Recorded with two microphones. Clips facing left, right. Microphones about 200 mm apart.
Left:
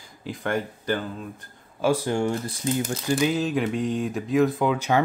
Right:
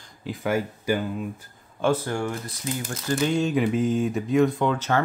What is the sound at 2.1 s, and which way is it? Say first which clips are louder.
Speech: left 4 dB; 25° left (ahead or behind).